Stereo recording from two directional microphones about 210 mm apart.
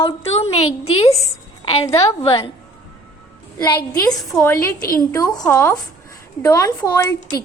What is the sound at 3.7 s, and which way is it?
Speech, 10° left (ahead or behind).